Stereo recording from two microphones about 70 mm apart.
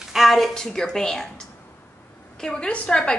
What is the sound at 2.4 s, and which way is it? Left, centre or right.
Speech, centre.